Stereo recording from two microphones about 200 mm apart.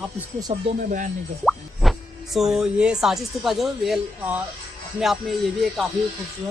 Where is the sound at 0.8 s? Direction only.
40° right (ahead or behind).